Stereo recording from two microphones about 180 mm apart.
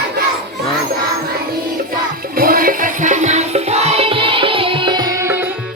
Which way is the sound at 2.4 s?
55° right (ahead or behind).